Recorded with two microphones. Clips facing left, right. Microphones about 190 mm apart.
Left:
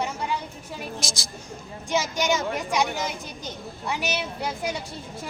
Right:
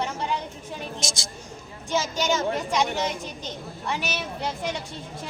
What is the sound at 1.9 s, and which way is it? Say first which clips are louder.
Speech: left 1 dB; 10° left (ahead or behind).